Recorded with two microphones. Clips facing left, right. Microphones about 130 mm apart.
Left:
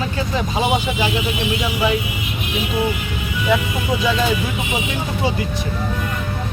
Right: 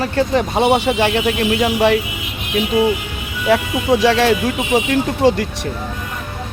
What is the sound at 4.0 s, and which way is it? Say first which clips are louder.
Speech: right 4 dB; 85° right.